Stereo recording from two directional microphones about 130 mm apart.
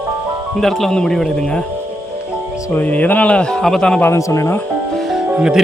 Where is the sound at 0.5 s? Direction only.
Centre (ahead or behind).